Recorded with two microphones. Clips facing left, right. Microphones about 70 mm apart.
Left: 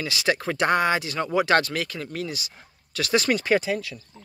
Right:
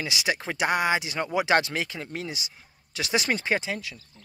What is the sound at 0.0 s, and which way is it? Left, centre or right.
Speech, centre.